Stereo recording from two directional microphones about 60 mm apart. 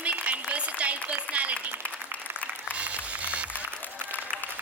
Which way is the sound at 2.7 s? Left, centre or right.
Right.